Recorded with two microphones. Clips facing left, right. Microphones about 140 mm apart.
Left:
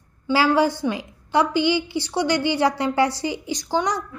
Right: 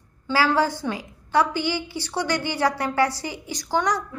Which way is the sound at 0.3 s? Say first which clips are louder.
Left 3 dB; 20° left (ahead or behind).